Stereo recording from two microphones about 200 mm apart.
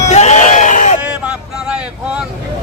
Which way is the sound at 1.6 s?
5° right (ahead or behind).